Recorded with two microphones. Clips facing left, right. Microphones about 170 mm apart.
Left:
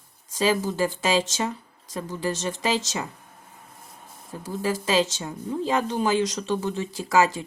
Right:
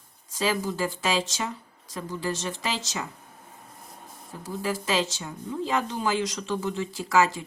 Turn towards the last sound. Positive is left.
turn(degrees=25)  # may be behind; listen again after turning